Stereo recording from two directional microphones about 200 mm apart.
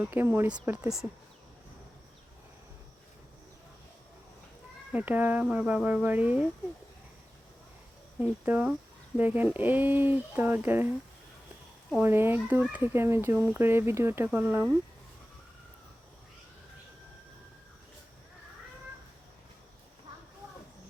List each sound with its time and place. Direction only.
0.0 s speech: 10° right (ahead or behind)
4.9 s speech: 10° right (ahead or behind)
8.2 s speech: 10° right (ahead or behind)
12.0 s speech: 10° right (ahead or behind)